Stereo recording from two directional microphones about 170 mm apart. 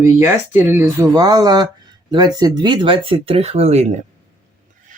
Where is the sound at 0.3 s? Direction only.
10° right (ahead or behind); by 3.8 s 40° right (ahead or behind).